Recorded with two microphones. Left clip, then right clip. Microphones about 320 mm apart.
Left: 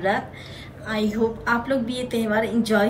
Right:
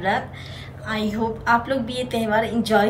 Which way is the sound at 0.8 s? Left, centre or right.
Centre.